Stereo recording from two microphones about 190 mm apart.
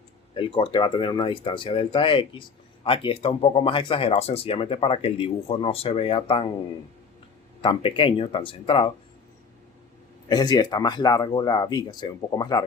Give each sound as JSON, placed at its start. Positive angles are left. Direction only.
{"t": 0.3, "sound": "speech", "side_deg": 25}
{"t": 7.6, "sound": "speech", "side_deg": 25}
{"t": 10.2, "sound": "speech", "side_deg": 20}